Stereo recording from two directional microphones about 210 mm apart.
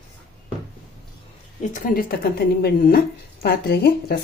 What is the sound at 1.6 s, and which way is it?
A woman's voice, 40° left (ahead or behind).